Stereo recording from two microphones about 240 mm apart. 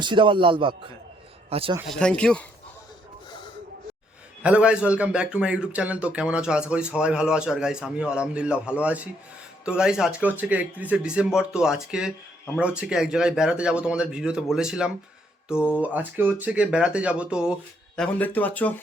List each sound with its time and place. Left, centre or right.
0.0 s a man's voice: centre
1.9 s a man's voice: centre
4.4 s a man's voice: centre